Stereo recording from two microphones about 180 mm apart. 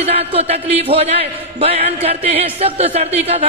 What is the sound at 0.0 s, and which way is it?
Speech, 35° right (ahead or behind).